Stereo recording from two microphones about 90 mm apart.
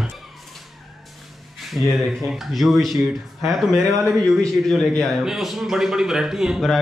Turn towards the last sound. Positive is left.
turn(degrees=0)  # may be behind; listen again after turning